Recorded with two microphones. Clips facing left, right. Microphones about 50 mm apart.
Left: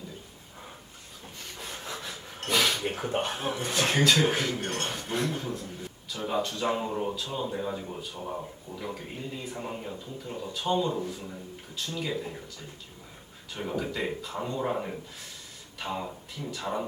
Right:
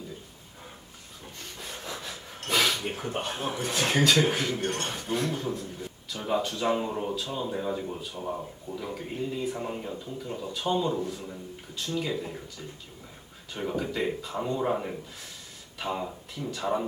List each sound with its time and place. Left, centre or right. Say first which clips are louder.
1.9 s a sound: even; centre
2.8 s speech: left 2 dB; centre
3.1 s a man's voice: left 3 dB; left
3.6 s speech: right 1 dB; centre
13.5 s speech: right 1 dB; centre